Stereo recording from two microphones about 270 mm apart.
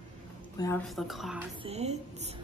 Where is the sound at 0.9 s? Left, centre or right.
Centre.